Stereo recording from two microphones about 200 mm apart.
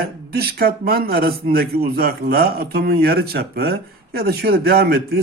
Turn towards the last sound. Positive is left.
turn(degrees=-50)  # may be behind; listen again after turning